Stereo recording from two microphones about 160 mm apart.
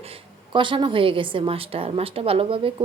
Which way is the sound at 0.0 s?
35° right (ahead or behind).